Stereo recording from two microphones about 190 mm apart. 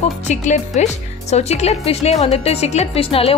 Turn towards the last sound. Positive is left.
turn(degrees=30)  # may be behind; listen again after turning